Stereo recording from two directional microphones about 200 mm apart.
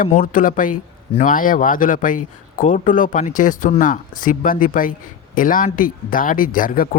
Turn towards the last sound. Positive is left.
turn(degrees=45)  # may be behind; listen again after turning